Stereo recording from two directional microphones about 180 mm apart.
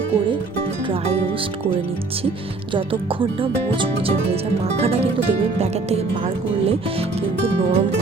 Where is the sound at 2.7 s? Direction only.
30° right (ahead or behind).